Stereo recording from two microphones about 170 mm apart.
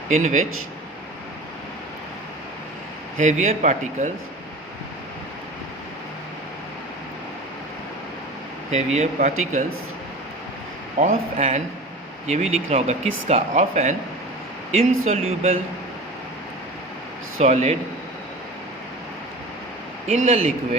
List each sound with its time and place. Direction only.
0.1 s speech: 40° right (ahead or behind)
3.2 s speech: 45° right (ahead or behind)
8.7 s speech: 40° right (ahead or behind)
11.0 s speech: 40° right (ahead or behind)
15.0 s speech: 40° right (ahead or behind)
17.4 s speech: 40° right (ahead or behind)
20.1 s speech: 40° right (ahead or behind)